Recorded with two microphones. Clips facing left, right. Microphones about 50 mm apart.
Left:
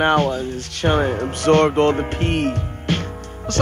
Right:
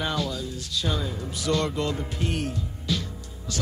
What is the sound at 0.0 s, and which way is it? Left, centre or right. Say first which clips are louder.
Speech: left 11 dB; left.